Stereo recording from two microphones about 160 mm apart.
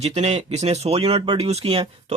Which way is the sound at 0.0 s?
45° right (ahead or behind).